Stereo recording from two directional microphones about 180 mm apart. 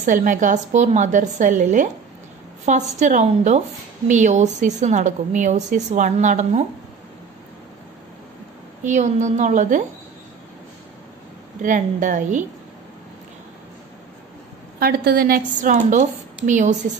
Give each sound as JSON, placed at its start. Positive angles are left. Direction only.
{"t": 0.0, "sound": "a woman's voice", "side_deg": -45}
{"t": 8.8, "sound": "a woman's voice", "side_deg": -40}
{"t": 11.6, "sound": "a woman's voice", "side_deg": -45}
{"t": 14.8, "sound": "a woman's voice", "side_deg": -55}